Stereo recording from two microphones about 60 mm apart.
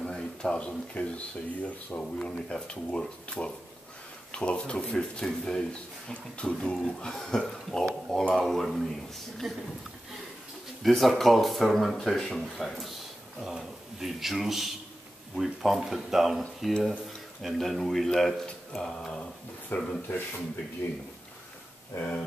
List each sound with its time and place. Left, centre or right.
0.1 s speech: centre
10.9 s speech: centre
19.7 s a man's voice: left
21.9 s speech: left